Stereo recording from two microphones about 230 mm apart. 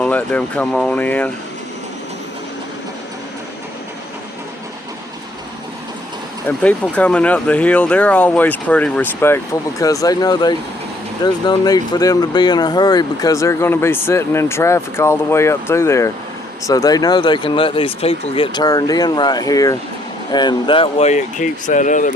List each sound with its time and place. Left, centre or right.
0.0 s speech: centre
6.6 s speech: centre; by 22.1 s left